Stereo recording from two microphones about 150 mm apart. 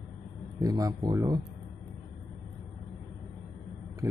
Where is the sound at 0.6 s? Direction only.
25° right (ahead or behind).